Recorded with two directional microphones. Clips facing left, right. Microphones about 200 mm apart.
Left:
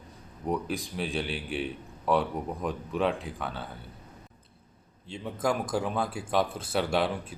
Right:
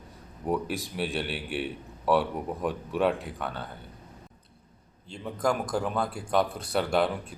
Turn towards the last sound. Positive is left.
turn(degrees=0)  # may be behind; listen again after turning